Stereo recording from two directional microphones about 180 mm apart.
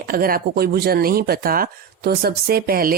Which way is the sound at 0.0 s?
55° right (ahead or behind).